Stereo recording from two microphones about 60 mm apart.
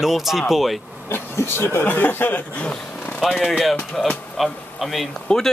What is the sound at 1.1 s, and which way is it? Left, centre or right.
Speech, left.